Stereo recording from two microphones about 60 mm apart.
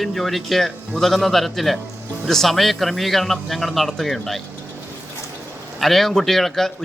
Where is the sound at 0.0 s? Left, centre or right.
Centre.